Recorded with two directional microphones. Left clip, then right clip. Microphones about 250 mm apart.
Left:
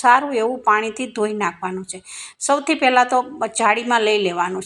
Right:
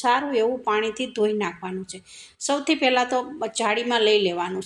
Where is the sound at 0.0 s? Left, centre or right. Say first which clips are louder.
Left 6 dB; centre.